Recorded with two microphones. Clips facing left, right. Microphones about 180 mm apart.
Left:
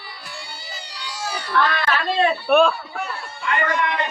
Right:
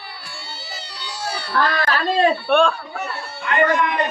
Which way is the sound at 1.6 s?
40° right (ahead or behind).